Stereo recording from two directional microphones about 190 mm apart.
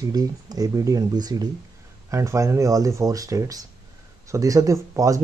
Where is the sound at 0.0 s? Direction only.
20° right (ahead or behind).